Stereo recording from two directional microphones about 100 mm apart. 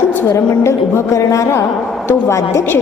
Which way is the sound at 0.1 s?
25° left (ahead or behind).